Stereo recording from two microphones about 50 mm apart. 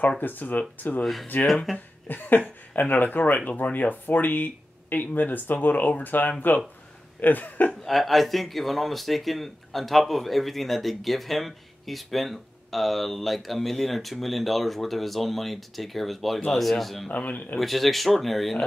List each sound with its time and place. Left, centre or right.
0.2 s speech: left
7.8 s speech: centre
17.1 s speech: left
17.6 s speech: centre